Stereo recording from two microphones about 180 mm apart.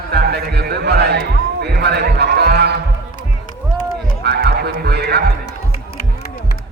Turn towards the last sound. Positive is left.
turn(degrees=-65)  # may be behind; listen again after turning